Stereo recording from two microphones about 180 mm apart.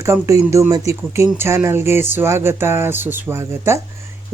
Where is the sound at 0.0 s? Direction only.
15° right (ahead or behind).